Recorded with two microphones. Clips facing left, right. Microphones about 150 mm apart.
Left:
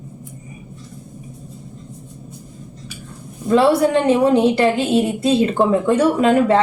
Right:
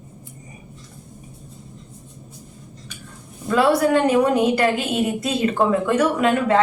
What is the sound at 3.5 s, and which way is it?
A woman's voice, 30° left (ahead or behind).